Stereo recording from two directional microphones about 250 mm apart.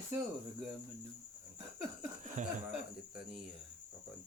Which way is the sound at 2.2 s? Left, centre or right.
Right.